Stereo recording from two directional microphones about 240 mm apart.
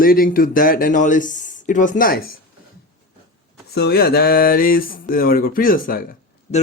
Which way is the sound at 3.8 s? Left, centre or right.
Left.